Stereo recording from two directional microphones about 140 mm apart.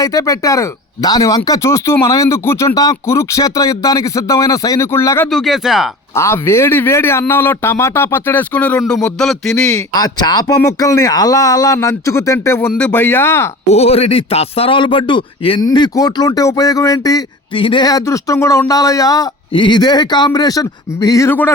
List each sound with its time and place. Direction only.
0.0 s speech: 25° left (ahead or behind)
5.3 s a sound: centre (ahead or behind)
6.1 s speech: 20° left (ahead or behind)
8.9 s a sound: 5° left (ahead or behind)
9.9 s speech: 30° left (ahead or behind)
13.7 s speech: 45° left (ahead or behind); by 17.2 s 25° left (ahead or behind)
17.5 s speech: 35° left (ahead or behind)
21.2 s speech: 15° left (ahead or behind)